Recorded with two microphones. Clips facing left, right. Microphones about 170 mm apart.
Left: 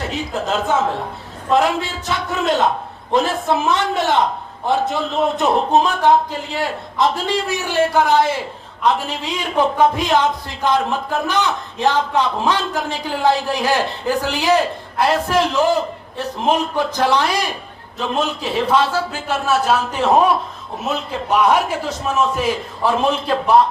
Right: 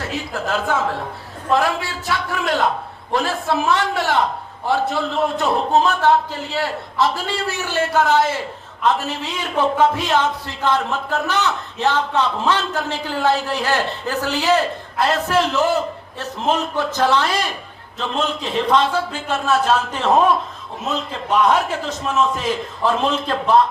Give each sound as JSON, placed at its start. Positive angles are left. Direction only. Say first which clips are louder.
{"t": 0.1, "sound": "a man's voice", "louder": "even", "side_deg": 20}